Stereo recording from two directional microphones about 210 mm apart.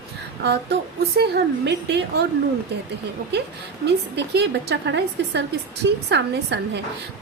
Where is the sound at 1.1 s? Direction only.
50° right (ahead or behind).